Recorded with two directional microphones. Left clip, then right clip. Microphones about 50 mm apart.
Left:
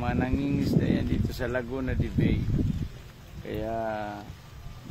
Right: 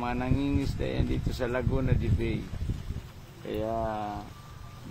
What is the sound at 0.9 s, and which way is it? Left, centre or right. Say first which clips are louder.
Speech: left 2 dB; left.